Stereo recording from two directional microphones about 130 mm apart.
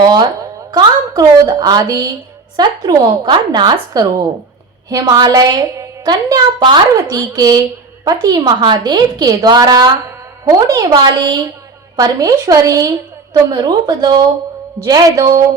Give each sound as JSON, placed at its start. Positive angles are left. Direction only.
{"t": 1.1, "sound": "a woman's voice", "side_deg": -30}